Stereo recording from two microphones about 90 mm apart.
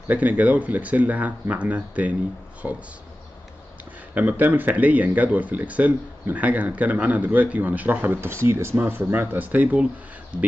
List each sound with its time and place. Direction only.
0.1 s speech: 15° right (ahead or behind)
4.1 s speech: 20° right (ahead or behind)